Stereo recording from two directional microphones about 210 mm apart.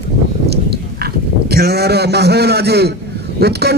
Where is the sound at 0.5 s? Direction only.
50° right (ahead or behind).